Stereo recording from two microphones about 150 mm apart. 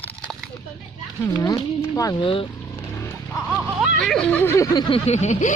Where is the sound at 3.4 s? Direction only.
5° right (ahead or behind); by 4.9 s 25° left (ahead or behind).